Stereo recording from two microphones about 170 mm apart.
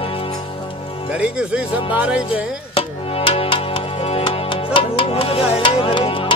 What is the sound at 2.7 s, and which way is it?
Music, 35° left (ahead or behind).